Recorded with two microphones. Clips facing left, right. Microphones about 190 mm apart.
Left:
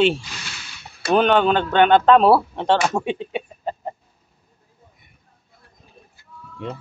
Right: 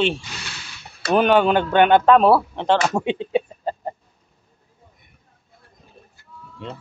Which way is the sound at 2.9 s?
25° right (ahead or behind).